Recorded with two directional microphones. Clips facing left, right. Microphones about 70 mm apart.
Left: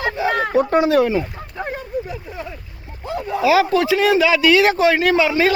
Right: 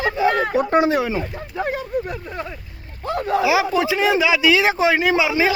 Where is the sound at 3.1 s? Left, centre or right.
Right.